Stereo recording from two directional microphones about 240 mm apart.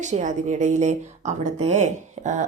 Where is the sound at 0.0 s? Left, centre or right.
Right.